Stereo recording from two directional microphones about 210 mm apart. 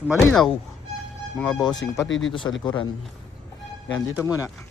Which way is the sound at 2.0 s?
65° left (ahead or behind).